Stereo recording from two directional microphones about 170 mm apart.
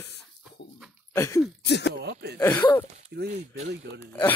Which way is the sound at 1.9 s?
75° right (ahead or behind).